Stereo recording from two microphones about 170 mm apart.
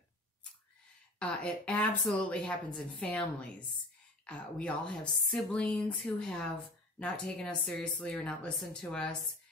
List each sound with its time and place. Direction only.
1.2 s a woman's voice: 10° left (ahead or behind)